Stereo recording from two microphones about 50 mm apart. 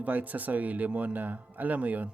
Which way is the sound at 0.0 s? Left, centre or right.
Right.